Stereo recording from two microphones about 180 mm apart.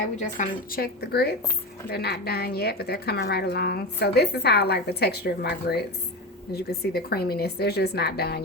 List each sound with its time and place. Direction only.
0.2 s speech: 50° left (ahead or behind)